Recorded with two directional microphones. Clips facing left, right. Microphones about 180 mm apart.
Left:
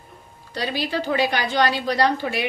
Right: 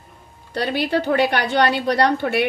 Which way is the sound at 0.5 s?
60° right (ahead or behind).